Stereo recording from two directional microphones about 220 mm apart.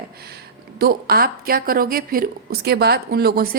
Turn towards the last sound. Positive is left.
turn(degrees=-45)  # may be behind; listen again after turning